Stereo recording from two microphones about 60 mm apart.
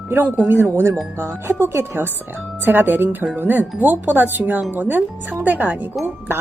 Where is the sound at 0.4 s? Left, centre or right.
Right.